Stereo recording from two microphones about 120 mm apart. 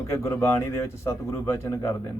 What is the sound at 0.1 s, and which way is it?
Speech, 25° left (ahead or behind).